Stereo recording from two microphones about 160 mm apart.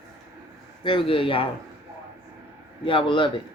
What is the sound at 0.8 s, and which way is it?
Speech, 30° left (ahead or behind).